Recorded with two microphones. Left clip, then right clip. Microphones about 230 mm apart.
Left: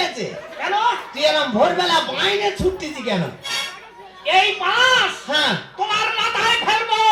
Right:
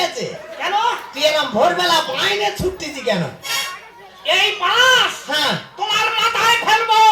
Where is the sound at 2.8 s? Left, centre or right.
Right.